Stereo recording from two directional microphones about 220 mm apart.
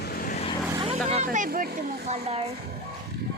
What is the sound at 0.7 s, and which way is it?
Vehicle, 20° right (ahead or behind).